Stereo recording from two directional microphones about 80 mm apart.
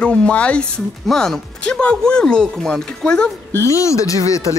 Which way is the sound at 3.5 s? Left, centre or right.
Left.